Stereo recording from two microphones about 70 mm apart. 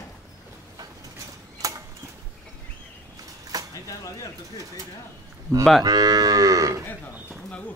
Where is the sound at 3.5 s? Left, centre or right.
Right.